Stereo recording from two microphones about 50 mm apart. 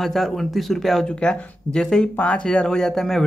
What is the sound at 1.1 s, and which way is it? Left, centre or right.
Speech, centre.